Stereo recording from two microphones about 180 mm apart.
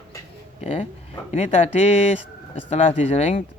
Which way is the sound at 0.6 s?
30° left (ahead or behind).